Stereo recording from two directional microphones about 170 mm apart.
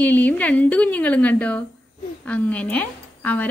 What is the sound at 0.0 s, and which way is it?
A woman's voice, 10° left (ahead or behind).